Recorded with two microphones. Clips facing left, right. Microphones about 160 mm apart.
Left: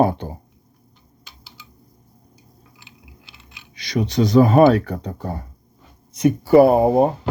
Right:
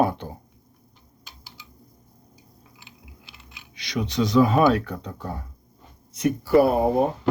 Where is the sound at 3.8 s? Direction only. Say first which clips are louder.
Left 5 dB; 40° left (ahead or behind).